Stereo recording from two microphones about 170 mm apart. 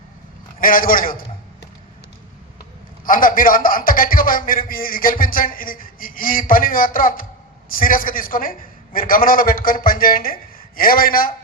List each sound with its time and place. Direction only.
0.6 s a man's voice: 55° left (ahead or behind)
3.0 s a man's voice: 55° left (ahead or behind)